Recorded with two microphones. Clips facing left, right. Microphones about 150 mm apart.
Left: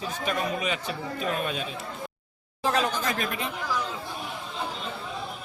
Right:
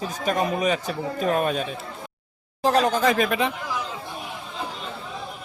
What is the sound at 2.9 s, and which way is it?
Speech, 80° right.